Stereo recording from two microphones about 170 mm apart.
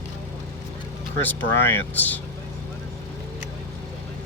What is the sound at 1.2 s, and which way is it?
Speech, 10° left (ahead or behind).